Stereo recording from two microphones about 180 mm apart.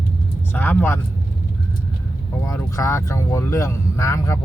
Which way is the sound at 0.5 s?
10° left (ahead or behind).